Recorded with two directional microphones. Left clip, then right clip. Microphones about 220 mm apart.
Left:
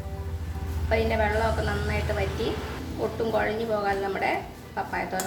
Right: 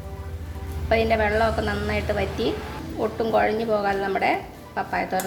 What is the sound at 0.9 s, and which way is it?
Speech, 40° right (ahead or behind).